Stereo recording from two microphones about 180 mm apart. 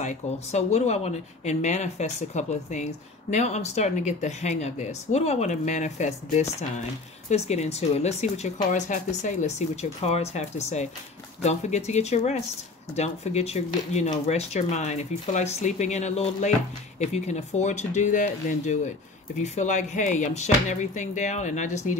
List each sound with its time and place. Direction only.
0.0 s speech: 40° left (ahead or behind)